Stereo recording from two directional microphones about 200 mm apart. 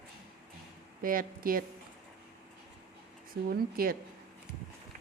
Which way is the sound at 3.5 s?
50° right (ahead or behind).